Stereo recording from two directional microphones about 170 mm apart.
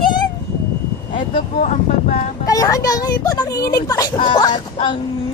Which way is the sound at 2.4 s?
20° left (ahead or behind).